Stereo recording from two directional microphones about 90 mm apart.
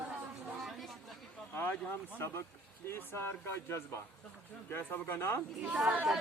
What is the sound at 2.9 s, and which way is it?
Speech, 25° left (ahead or behind).